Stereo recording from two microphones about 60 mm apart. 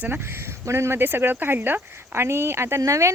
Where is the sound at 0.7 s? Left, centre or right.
Right.